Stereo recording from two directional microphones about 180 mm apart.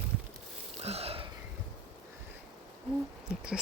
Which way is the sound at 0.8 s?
35° right (ahead or behind).